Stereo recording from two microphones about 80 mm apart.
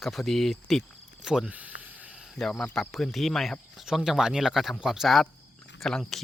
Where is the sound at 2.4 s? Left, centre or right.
Centre.